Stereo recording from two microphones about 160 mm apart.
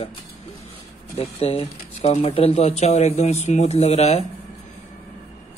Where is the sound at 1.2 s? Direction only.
40° left (ahead or behind).